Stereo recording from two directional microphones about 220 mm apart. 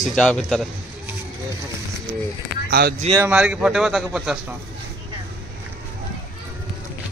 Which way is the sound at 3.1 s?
5° right (ahead or behind).